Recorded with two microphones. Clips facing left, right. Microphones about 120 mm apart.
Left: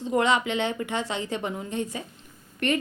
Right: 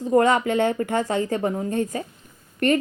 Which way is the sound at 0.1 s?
45° right (ahead or behind).